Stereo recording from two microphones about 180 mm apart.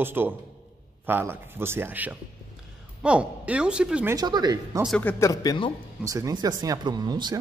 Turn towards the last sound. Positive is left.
turn(degrees=-20)  # may be behind; listen again after turning